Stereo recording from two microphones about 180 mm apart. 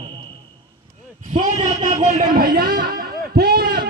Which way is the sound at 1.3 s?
40° right (ahead or behind).